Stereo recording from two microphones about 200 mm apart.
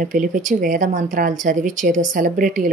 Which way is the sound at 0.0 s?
40° right (ahead or behind).